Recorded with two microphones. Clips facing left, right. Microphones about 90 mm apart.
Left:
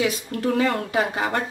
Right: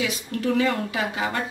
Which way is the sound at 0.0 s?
40° left (ahead or behind).